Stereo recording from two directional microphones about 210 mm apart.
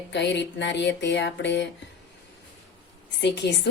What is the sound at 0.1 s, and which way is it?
Speech, 55° left (ahead or behind).